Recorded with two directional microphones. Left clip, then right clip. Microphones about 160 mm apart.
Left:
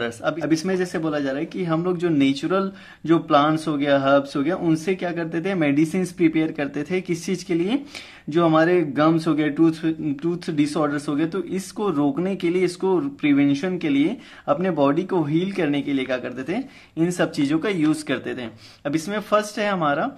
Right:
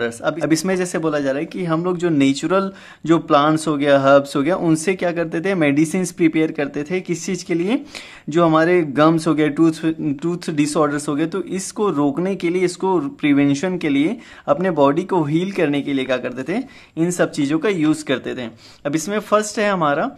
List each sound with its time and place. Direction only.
0.0 s speech: 30° right (ahead or behind)
0.5 s speech: 40° right (ahead or behind)